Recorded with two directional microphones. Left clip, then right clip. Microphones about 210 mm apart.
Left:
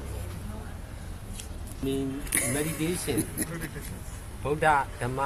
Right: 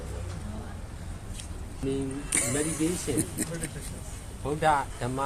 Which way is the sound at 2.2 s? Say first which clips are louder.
Right 2 dB; centre (ahead or behind).